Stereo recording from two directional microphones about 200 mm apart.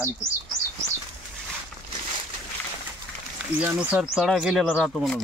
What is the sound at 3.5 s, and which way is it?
Speech, 5° right (ahead or behind).